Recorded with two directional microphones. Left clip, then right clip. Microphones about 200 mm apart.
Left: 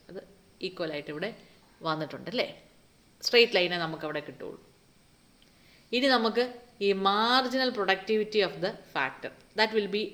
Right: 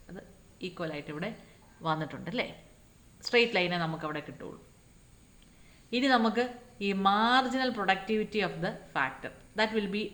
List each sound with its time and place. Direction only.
0.1 s a sound: 45° left (ahead or behind)
1.8 s a woman's voice: 40° left (ahead or behind)
5.9 s speech: 40° left (ahead or behind)